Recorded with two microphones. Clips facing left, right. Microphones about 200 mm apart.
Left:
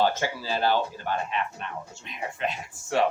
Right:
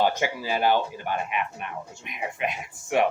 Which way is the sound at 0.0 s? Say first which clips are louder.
Right 1 dB; 15° right (ahead or behind).